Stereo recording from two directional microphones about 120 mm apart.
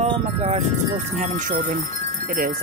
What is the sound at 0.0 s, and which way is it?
Speech, 65° right (ahead or behind).